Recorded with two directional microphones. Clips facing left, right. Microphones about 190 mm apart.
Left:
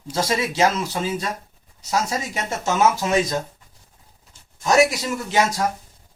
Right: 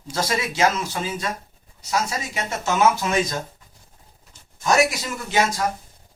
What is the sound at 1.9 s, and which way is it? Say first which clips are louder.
Speech: left 2 dB; 40° left (ahead or behind).